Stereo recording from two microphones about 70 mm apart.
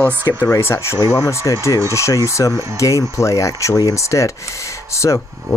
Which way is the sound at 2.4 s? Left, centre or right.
Left.